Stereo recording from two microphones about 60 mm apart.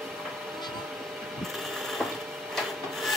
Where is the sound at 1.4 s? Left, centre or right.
Centre.